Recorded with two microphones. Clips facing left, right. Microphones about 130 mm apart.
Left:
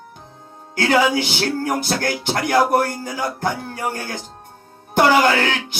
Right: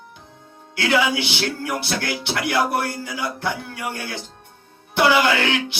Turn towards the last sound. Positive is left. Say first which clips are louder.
# left 1 dB
turn(degrees=40)  # may be behind; listen again after turning